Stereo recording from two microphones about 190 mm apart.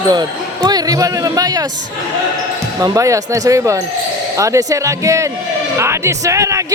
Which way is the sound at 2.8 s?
15° right (ahead or behind).